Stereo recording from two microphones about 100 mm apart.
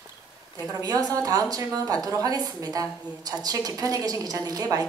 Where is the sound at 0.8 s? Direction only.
40° right (ahead or behind).